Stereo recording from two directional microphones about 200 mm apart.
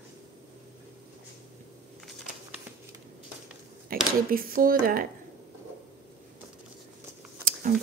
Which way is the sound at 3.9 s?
45° right (ahead or behind).